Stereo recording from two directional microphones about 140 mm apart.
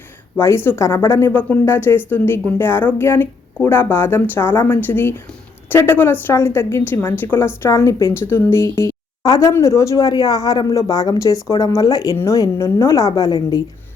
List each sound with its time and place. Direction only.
0.3 s a woman's voice: 20° left (ahead or behind)